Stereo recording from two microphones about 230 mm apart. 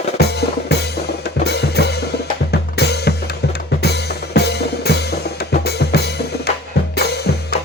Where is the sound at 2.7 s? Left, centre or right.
Left.